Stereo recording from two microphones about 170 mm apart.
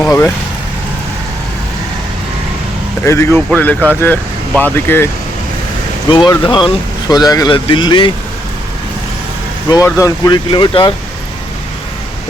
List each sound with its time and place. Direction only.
0.0 s speech: 15° left (ahead or behind)
3.0 s speech: 15° left (ahead or behind)
6.1 s speech: 30° left (ahead or behind)
9.6 s speech: 20° left (ahead or behind)